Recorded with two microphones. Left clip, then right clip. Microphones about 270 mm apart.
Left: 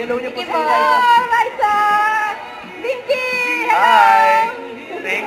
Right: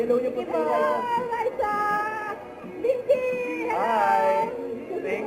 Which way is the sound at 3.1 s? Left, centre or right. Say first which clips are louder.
Left 6 dB; centre.